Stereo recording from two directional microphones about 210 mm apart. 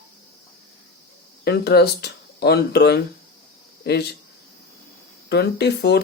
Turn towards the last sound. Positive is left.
turn(degrees=50)  # may be behind; listen again after turning